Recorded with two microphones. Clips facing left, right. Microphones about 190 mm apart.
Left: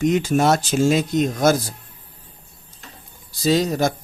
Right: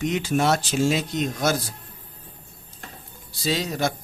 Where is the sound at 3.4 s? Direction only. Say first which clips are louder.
Left 6 dB; 45° left (ahead or behind).